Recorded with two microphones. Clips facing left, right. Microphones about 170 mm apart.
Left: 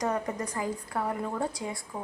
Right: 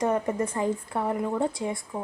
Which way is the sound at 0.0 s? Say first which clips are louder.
Right 5 dB; 25° right (ahead or behind).